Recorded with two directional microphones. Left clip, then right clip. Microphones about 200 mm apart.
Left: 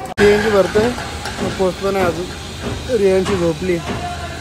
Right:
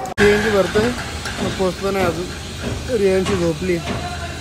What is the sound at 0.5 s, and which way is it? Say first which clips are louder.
Speech: left 3 dB; 5° right (ahead or behind).